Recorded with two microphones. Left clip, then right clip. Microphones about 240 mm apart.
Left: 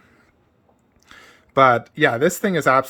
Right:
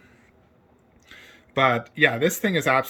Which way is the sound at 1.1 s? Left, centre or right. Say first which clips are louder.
Left 1 dB; centre.